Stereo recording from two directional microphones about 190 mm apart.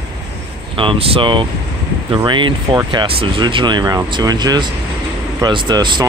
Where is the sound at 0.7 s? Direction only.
30° right (ahead or behind).